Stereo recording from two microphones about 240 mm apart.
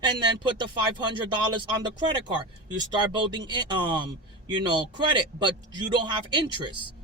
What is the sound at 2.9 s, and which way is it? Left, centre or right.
Speech, centre.